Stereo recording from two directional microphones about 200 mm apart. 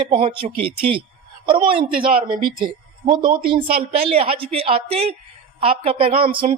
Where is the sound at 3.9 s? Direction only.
30° right (ahead or behind).